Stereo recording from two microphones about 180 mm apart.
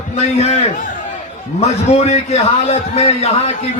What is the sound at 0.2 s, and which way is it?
Speech, 35° left (ahead or behind).